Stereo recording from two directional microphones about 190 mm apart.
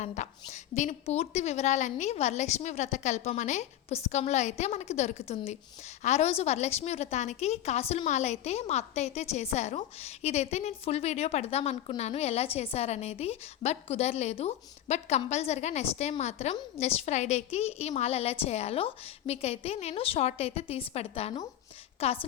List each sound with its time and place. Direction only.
0.0 s a woman's voice: 40° left (ahead or behind)